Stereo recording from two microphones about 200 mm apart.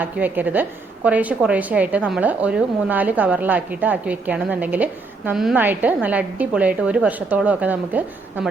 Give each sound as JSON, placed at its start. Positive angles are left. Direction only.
{"t": 0.0, "sound": "a woman's voice", "side_deg": -10}